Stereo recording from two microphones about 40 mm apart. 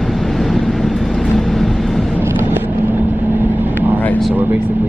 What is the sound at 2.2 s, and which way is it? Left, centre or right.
Vehicle, right.